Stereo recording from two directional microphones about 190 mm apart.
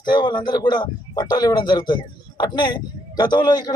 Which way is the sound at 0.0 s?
25° left (ahead or behind).